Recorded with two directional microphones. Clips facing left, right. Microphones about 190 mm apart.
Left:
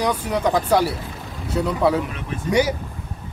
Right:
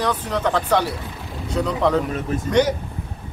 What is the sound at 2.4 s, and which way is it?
Speech, 10° left (ahead or behind).